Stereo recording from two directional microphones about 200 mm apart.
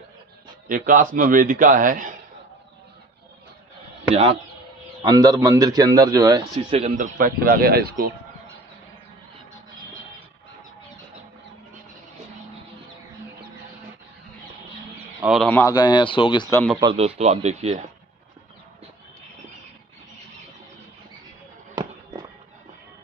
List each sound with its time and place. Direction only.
0.7 s a man's voice: 45° right (ahead or behind)
4.1 s speech: 30° right (ahead or behind)
5.0 s a man's voice: 20° right (ahead or behind)
6.7 s speech: 30° right (ahead or behind)
7.2 s a man's voice: 45° right (ahead or behind)
9.5 s music: 80° left
15.4 s speech: 10° left (ahead or behind)
15.7 s speech: 20° left (ahead or behind)
16.4 s speech: 10° left (ahead or behind)
16.8 s speech: 30° right (ahead or behind)